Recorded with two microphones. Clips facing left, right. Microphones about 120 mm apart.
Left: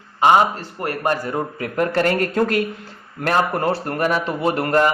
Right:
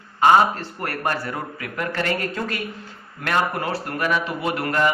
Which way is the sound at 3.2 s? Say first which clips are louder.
Left 4 dB; 35° left (ahead or behind).